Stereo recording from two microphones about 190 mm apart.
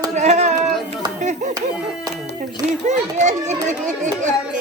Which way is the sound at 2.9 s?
40° right (ahead or behind).